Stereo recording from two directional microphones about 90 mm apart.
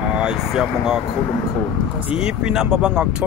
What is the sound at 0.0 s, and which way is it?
Speech, 10° right (ahead or behind).